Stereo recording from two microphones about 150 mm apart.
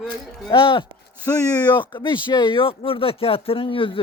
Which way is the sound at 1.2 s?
20° left (ahead or behind).